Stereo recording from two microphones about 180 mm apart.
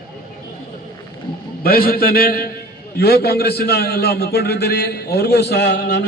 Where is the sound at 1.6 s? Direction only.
55° left (ahead or behind).